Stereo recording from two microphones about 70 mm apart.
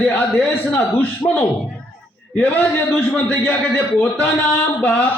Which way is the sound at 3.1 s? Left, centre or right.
Centre.